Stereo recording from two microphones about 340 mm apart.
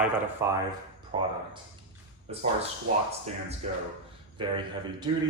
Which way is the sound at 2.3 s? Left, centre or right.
Centre.